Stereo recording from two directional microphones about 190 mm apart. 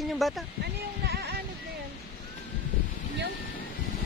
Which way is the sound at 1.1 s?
55° right (ahead or behind).